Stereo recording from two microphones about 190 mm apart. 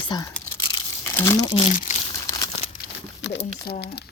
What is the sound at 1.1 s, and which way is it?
Speech, 15° left (ahead or behind).